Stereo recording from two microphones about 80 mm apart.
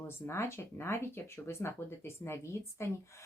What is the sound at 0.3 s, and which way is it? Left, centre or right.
Speech, left.